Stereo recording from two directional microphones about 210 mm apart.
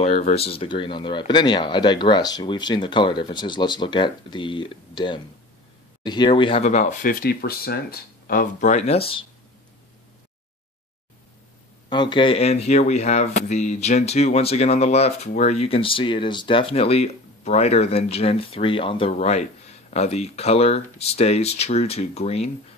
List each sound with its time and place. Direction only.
0.0 s speech: 30° left (ahead or behind)
11.9 s speech: 20° left (ahead or behind)